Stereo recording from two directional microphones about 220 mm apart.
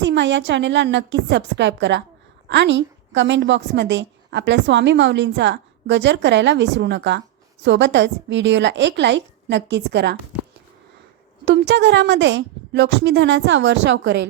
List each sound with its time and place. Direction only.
0.0 s a woman's voice: 55° right (ahead or behind)
11.4 s a woman's voice: 50° right (ahead or behind)